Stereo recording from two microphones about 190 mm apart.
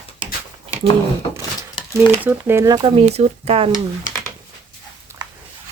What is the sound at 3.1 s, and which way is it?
Speech, 35° right (ahead or behind).